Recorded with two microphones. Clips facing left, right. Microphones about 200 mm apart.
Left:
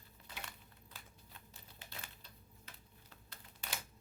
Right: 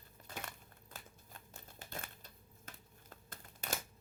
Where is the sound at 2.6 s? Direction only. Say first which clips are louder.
Right 7 dB; 50° right (ahead or behind).